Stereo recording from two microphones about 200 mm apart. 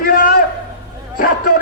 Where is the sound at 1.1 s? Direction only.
45° left (ahead or behind).